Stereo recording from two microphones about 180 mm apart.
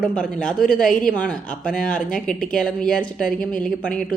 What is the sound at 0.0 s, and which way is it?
A woman's voice, 5° left (ahead or behind).